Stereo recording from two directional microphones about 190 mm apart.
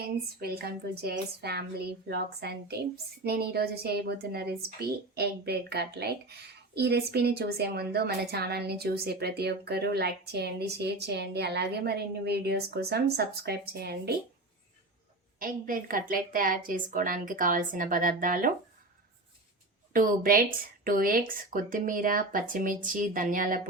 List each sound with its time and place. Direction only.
0.0 s a woman's voice: 55° right (ahead or behind)
15.4 s a woman's voice: 45° right (ahead or behind)
19.9 s a woman's voice: 45° right (ahead or behind)